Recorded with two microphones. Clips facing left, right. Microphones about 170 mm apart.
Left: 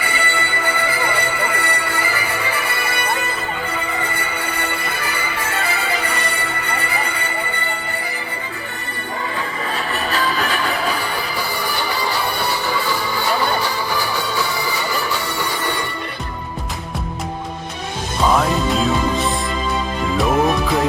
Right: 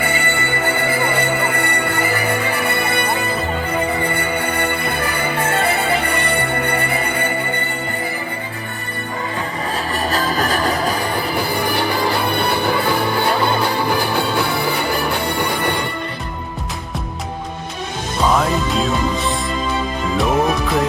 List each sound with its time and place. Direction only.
0.0 s music: 55° right (ahead or behind)
9.7 s music: 40° right (ahead or behind)
11.3 s music: 55° right (ahead or behind)
18.2 s music: centre (ahead or behind)